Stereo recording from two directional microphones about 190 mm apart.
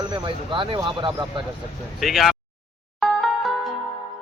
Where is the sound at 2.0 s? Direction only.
Centre (ahead or behind).